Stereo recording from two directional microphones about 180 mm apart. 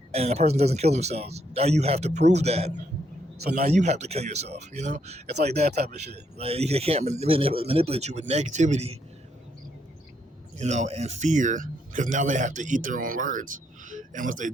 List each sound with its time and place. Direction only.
0.1 s speech: 35° right (ahead or behind)
5.3 s speech: 65° right (ahead or behind)
6.3 s speech: 35° right (ahead or behind)
10.6 s a man's voice: 40° right (ahead or behind)